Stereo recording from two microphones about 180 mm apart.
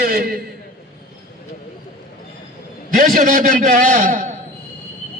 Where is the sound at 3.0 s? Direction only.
45° right (ahead or behind).